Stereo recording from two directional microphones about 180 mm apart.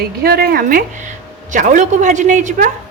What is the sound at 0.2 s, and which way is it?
A woman's voice, 55° right (ahead or behind).